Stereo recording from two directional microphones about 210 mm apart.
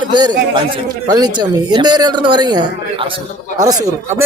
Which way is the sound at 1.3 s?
20° right (ahead or behind).